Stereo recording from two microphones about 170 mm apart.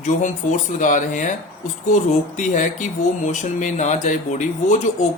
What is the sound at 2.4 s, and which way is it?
Speech, 45° left (ahead or behind).